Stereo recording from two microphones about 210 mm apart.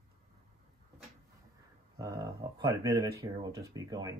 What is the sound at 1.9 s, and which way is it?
Speech, 15° right (ahead or behind).